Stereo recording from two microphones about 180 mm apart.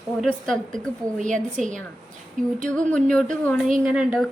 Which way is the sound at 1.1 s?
45° right (ahead or behind).